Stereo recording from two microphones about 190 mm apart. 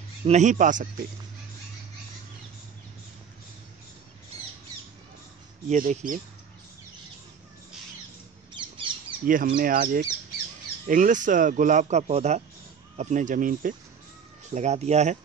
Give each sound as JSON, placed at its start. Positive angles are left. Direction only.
{"t": 0.2, "sound": "speech", "side_deg": -40}
{"t": 5.7, "sound": "speech", "side_deg": -45}
{"t": 8.5, "sound": "squawk", "side_deg": -25}
{"t": 9.2, "sound": "speech", "side_deg": -45}